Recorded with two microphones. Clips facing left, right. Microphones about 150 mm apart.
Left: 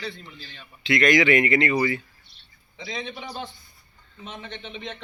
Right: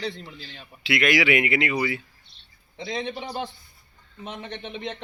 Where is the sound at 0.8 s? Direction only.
5° right (ahead or behind).